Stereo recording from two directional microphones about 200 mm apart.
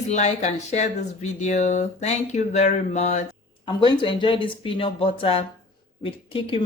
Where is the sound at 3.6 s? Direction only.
25° left (ahead or behind).